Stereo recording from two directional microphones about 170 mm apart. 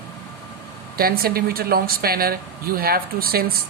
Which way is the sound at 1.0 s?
60° right (ahead or behind).